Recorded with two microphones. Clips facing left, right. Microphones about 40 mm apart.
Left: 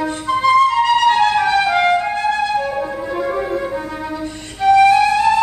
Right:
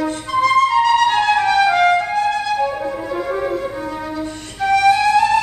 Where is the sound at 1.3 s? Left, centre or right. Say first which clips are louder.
Right 1 dB; centre.